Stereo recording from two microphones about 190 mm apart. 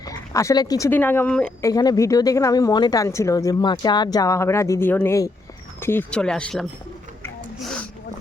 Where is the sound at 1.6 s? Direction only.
20° left (ahead or behind); by 6.7 s 5° left (ahead or behind).